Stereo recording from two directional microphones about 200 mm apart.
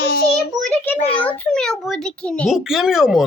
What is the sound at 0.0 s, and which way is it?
Child singing, 50° left (ahead or behind).